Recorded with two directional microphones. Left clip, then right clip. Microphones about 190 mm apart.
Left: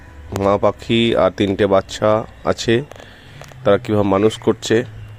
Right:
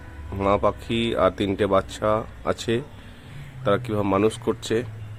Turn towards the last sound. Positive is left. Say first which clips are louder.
# left 8 dB
turn(degrees=30)  # may be behind; listen again after turning